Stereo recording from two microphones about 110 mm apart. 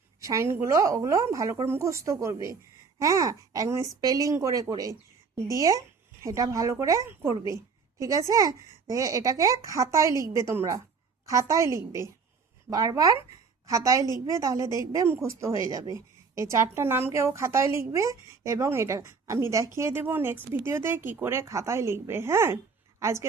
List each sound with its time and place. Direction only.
0.2 s a woman's voice: 30° right (ahead or behind)
4.8 s a sound: 30° right (ahead or behind)
5.5 s a woman's voice: 30° right (ahead or behind)